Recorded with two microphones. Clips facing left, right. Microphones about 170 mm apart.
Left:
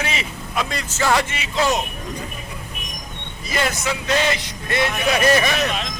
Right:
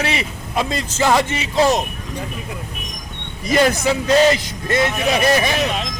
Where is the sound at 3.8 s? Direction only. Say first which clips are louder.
Right 7 dB; 35° right (ahead or behind).